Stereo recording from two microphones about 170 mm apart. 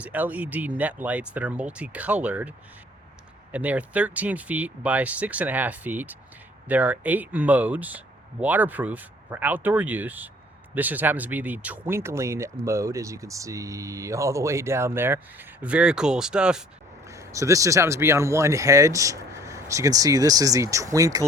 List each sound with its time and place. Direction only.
0.0 s speech: 10° right (ahead or behind)
17.1 s speech: 15° right (ahead or behind)